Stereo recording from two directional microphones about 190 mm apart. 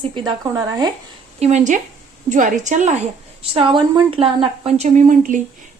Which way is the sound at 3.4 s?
30° right (ahead or behind).